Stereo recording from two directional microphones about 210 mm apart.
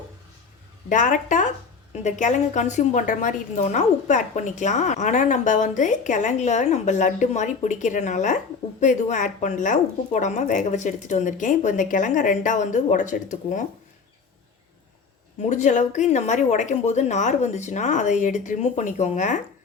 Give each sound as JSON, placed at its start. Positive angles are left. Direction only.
{"t": 0.9, "sound": "a woman's voice", "side_deg": 35}
{"t": 15.4, "sound": "a woman's voice", "side_deg": 35}